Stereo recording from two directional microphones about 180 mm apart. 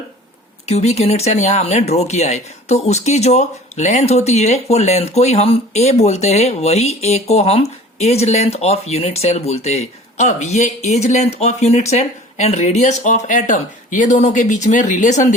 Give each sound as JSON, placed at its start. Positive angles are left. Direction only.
{"t": 0.6, "sound": "speech", "side_deg": 35}